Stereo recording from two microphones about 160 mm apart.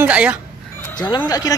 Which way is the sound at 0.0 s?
10° right (ahead or behind).